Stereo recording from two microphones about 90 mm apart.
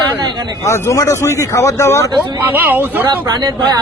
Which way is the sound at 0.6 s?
35° left (ahead or behind).